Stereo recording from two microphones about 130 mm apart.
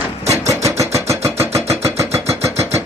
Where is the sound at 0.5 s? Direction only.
25° right (ahead or behind).